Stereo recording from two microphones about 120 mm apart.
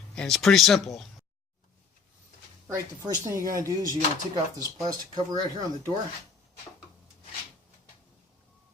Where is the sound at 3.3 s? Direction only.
25° right (ahead or behind).